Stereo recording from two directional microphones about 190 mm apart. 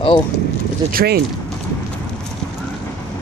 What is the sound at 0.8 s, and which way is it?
Speech, 55° right (ahead or behind).